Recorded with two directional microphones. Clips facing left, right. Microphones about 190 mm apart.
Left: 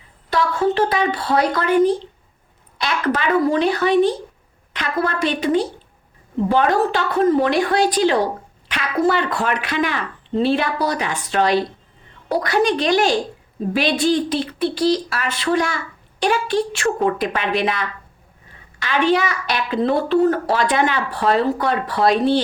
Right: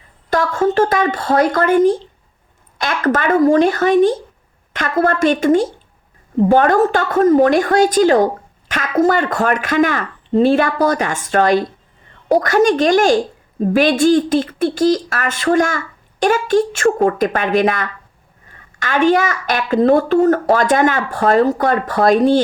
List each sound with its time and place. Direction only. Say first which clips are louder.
0.3 s a woman's voice: right 3 dB; 45° right (ahead or behind)